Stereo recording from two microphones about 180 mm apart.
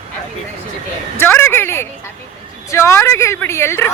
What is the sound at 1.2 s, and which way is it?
Speech, 15° left (ahead or behind).